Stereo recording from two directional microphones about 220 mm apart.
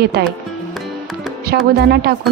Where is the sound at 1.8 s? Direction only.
45° right (ahead or behind).